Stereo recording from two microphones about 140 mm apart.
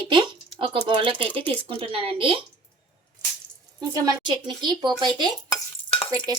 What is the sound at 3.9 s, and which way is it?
Speech, 30° right (ahead or behind).